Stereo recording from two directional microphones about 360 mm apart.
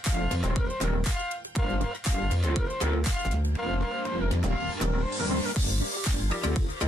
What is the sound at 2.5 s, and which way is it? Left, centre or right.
Music, centre.